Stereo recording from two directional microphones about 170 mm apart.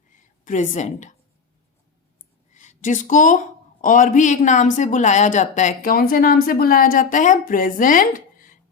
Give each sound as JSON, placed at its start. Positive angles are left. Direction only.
{"t": 0.4, "sound": "speech", "side_deg": 50}
{"t": 2.5, "sound": "speech", "side_deg": 45}